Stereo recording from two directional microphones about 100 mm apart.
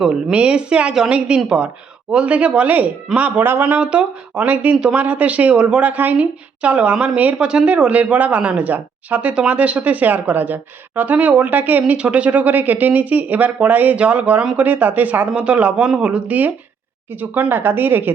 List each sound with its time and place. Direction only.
0.0 s speech: 10° right (ahead or behind)